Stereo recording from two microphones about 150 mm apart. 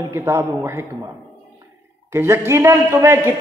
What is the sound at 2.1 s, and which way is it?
A man's voice, 15° right (ahead or behind).